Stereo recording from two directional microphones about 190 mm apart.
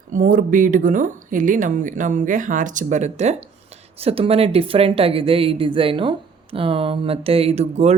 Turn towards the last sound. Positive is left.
turn(degrees=-35)  # may be behind; listen again after turning